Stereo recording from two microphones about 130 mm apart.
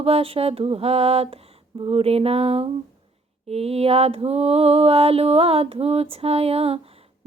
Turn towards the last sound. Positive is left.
turn(degrees=-50)  # may be behind; listen again after turning